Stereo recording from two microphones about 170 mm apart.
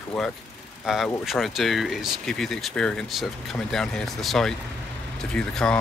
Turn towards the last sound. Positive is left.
turn(degrees=5)  # may be behind; listen again after turning